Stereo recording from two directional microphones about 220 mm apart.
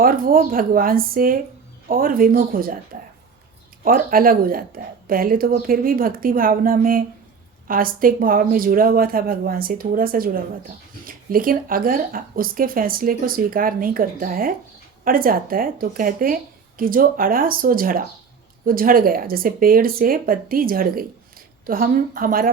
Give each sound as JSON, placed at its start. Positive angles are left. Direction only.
{"t": 0.0, "sound": "speech", "side_deg": -40}